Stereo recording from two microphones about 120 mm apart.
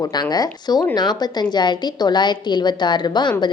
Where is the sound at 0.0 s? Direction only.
35° left (ahead or behind).